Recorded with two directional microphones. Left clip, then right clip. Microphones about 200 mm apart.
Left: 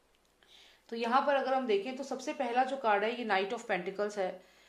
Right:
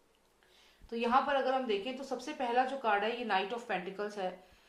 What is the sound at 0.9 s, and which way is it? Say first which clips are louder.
A woman's voice: left 1 dB; 35° left (ahead or behind).